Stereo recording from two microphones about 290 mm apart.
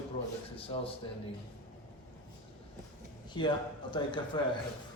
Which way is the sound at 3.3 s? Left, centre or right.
Centre.